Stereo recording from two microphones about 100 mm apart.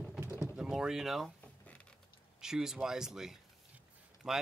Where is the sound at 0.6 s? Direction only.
5° right (ahead or behind).